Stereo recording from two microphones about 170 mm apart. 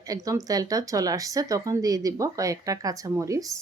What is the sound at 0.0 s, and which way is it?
Speech, 20° right (ahead or behind).